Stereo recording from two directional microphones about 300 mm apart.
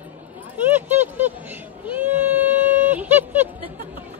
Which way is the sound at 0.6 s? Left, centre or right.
Centre.